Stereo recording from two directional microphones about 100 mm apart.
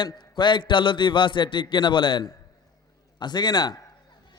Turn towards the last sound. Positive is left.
turn(degrees=45)  # may be behind; listen again after turning